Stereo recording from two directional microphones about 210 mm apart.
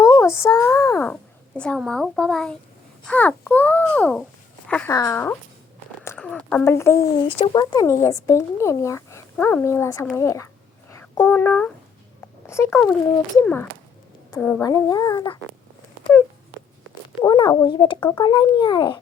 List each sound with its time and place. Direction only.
0.0 s a child's voice: 15° left (ahead or behind)
7.3 s a woman's voice: 25° left (ahead or behind)
17.2 s a child's voice: 20° left (ahead or behind)